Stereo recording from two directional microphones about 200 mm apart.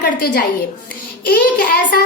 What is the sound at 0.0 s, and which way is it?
A woman's voice, 50° left (ahead or behind).